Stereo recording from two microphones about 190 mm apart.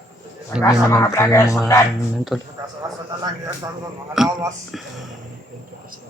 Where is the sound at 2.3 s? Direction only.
Centre (ahead or behind).